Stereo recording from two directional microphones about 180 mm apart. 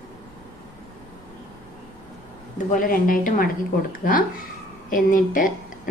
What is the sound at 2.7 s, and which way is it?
A woman's voice, 50° left (ahead or behind).